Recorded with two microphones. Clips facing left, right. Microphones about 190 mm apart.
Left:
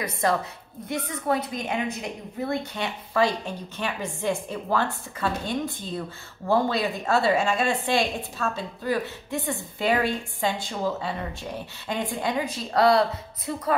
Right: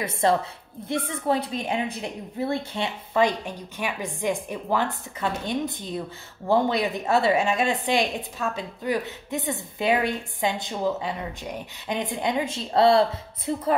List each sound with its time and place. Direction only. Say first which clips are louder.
0.0 s a woman's voice: right 2 dB; 25° right (ahead or behind)